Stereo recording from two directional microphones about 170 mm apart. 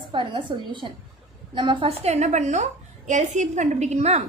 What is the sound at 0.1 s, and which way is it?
A woman's voice, 30° right (ahead or behind).